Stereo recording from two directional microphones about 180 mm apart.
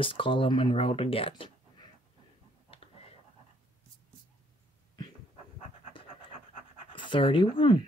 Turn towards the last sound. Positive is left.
turn(degrees=30)  # may be behind; listen again after turning